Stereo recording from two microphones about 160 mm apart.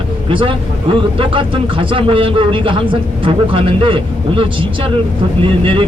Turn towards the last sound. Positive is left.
turn(degrees=-35)  # may be behind; listen again after turning